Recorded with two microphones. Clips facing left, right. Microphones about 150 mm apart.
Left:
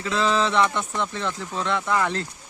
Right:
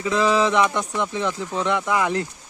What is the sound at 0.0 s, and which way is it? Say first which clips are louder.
Speech: right 3 dB; 15° right (ahead or behind).